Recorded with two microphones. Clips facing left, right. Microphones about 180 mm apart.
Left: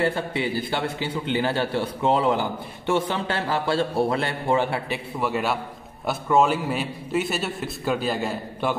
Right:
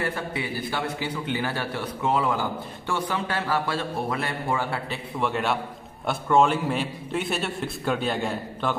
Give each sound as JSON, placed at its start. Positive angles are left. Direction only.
{"t": 0.0, "sound": "a man's voice", "side_deg": 25}
{"t": 4.8, "sound": "a man's voice", "side_deg": 10}